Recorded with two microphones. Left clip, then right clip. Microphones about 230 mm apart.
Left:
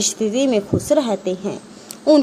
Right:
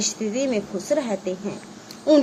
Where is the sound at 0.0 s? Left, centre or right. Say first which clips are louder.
Left 6 dB; left.